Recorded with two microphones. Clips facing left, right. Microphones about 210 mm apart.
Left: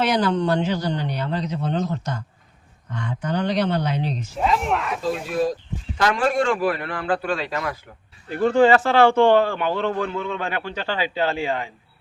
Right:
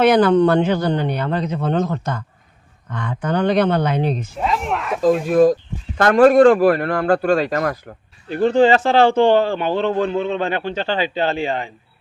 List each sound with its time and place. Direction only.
0.0 s speech: 55° right (ahead or behind)
4.4 s speech: centre (ahead or behind)
5.3 s a man's voice: 50° right (ahead or behind)
8.3 s a man's voice: 25° right (ahead or behind)